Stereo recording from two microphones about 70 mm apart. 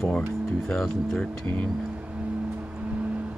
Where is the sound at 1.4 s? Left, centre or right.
Centre.